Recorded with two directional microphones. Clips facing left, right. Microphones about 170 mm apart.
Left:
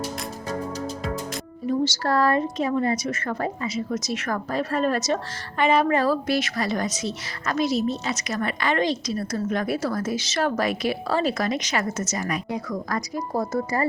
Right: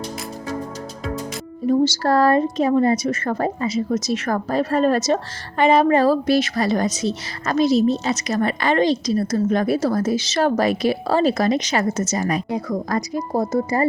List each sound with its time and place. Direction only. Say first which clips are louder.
1.6 s a woman's voice: right 6 dB; 35° right (ahead or behind)